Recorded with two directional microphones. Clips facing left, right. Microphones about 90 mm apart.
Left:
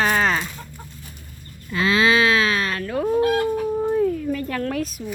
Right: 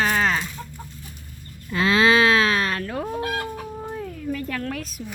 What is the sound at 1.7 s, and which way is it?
Livestock, 50° right (ahead or behind).